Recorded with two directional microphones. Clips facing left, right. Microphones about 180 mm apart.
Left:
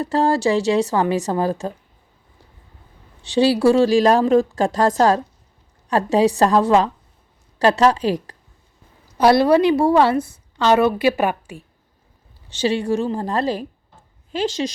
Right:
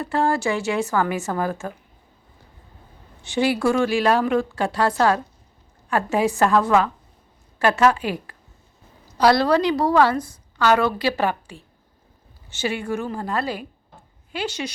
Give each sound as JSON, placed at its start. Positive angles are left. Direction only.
{"t": 0.0, "sound": "speech", "side_deg": 35}
{"t": 3.3, "sound": "speech", "side_deg": 35}
{"t": 9.1, "sound": "a woman's voice", "side_deg": 20}
{"t": 12.5, "sound": "speech", "side_deg": 30}